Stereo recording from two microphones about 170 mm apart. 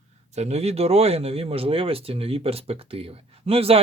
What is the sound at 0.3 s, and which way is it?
Speech, 40° right (ahead or behind).